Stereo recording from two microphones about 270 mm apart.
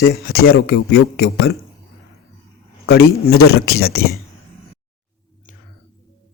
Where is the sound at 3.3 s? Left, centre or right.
Left.